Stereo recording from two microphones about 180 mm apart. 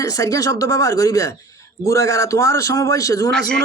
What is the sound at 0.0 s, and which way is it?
A man's voice, 20° left (ahead or behind).